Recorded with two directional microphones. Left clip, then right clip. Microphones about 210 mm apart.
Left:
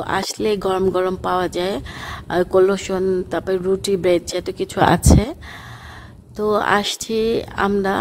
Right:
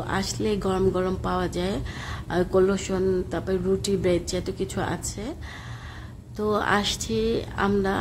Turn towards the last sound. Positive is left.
turn(degrees=35)  # may be behind; listen again after turning